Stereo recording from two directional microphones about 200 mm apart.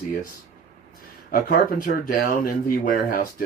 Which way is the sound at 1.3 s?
45° left (ahead or behind).